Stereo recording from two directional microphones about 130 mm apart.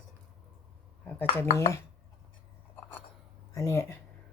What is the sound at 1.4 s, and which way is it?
Speech, 20° left (ahead or behind).